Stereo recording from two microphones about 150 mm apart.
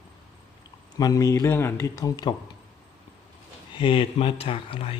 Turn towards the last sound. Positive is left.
turn(degrees=35)  # may be behind; listen again after turning